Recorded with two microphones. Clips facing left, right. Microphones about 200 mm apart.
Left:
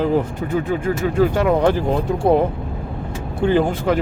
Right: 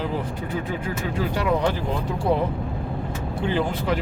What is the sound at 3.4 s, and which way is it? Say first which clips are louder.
Speech: left 7 dB; 50° left (ahead or behind).